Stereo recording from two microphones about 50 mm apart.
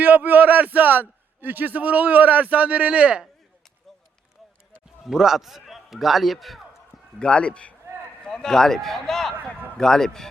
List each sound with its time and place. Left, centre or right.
0.0 s a man's voice: right
5.0 s a man's voice: centre
7.2 s a man's voice: left
9.3 s a man's voice: right
9.7 s a man's voice: centre